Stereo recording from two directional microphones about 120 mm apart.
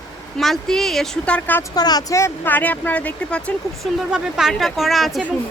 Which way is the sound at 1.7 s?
35° left (ahead or behind).